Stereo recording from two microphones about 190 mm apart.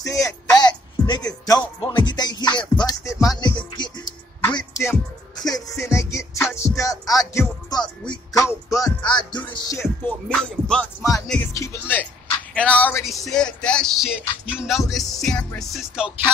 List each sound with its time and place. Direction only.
0.0 s speech: 15° left (ahead or behind)
0.6 s music: 25° left (ahead or behind)
7.8 s music: 5° left (ahead or behind)
8.6 s music: 20° left (ahead or behind)
10.0 s music: 5° left (ahead or behind)
11.5 s music: 15° left (ahead or behind); by 16.1 s centre (ahead or behind)